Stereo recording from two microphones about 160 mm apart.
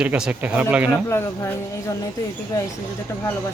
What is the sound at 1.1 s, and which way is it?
Speech, 15° left (ahead or behind).